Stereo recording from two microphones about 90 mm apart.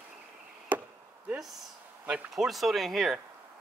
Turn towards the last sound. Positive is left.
turn(degrees=0)  # may be behind; listen again after turning